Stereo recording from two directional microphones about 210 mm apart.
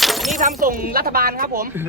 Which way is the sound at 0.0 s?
Centre (ahead or behind).